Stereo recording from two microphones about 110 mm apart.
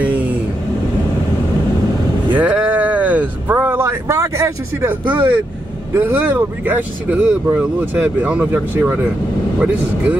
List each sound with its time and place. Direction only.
0.0 s vehicle: 15° right (ahead or behind)
2.3 s a sound: 15° right (ahead or behind)
5.0 s speech: 15° right (ahead or behind)